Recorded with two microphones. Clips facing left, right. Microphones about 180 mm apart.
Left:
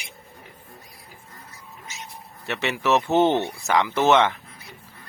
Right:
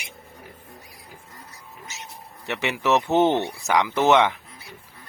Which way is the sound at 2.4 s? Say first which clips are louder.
Even; 15° right (ahead or behind).